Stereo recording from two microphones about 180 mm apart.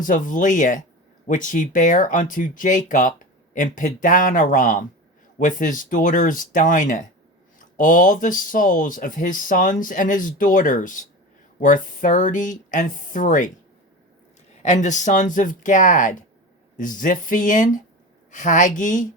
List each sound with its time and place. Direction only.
0.0 s speech: 45° left (ahead or behind)
14.6 s speech: 40° left (ahead or behind)